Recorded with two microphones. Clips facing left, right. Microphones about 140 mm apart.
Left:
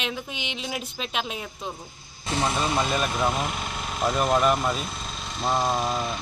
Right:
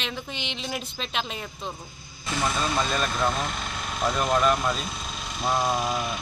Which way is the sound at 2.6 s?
10° left (ahead or behind).